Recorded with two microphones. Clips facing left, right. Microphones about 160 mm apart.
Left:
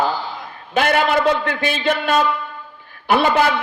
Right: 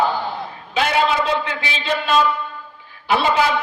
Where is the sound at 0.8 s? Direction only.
55° left (ahead or behind).